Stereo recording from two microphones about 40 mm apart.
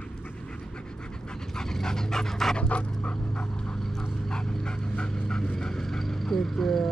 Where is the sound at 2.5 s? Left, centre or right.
Left.